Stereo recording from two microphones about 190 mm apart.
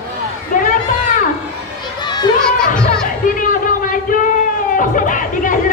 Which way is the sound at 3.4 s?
45° left (ahead or behind).